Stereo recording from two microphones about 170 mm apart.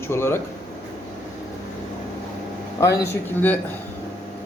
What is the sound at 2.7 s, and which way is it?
Speech, 15° left (ahead or behind).